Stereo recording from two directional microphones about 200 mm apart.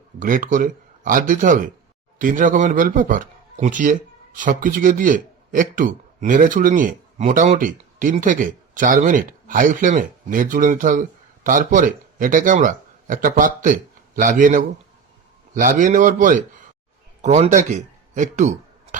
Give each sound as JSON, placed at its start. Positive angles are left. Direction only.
{"t": 0.2, "sound": "speech", "side_deg": -40}